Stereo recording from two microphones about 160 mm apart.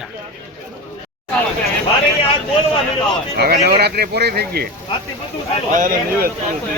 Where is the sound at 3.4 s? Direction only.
80° right.